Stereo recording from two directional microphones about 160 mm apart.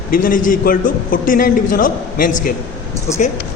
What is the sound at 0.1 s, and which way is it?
A man's voice, 60° left (ahead or behind).